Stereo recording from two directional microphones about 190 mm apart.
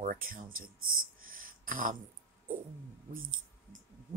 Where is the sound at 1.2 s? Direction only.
45° right (ahead or behind).